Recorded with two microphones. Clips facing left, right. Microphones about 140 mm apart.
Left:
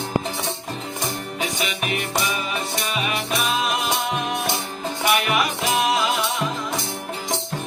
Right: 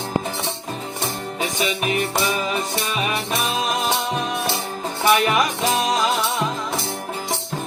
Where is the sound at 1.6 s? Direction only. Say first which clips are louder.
Right 4 dB; 35° right (ahead or behind).